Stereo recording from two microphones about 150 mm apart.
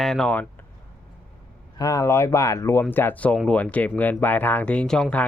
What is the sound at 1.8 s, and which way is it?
Speech, 20° left (ahead or behind).